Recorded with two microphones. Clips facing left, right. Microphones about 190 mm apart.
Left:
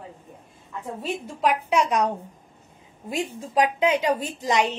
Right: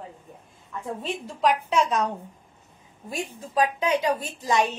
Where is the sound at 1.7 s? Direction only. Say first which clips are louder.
Left 2 dB; 15° left (ahead or behind).